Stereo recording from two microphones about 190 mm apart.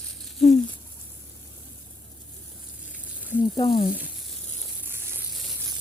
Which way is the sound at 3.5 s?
25° left (ahead or behind).